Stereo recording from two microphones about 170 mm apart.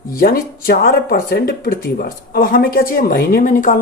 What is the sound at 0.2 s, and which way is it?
Speech, 65° left (ahead or behind).